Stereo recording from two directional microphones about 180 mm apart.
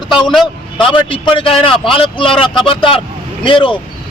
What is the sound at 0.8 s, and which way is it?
Speech, 30° left (ahead or behind).